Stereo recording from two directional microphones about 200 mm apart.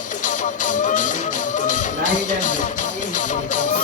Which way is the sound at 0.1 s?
40° left (ahead or behind).